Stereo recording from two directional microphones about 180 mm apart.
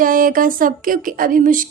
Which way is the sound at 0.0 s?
50° right (ahead or behind).